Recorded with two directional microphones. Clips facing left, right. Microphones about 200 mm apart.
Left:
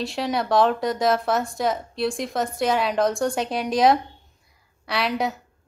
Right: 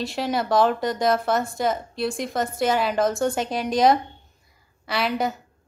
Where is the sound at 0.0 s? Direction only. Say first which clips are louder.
Even; centre (ahead or behind).